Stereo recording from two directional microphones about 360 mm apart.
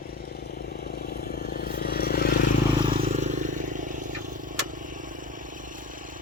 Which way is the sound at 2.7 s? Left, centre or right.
Centre.